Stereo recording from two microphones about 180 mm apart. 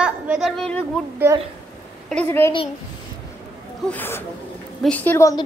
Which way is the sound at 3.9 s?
10° left (ahead or behind).